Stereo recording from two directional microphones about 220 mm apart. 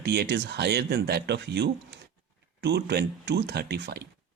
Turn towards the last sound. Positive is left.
turn(degrees=-50)  # may be behind; listen again after turning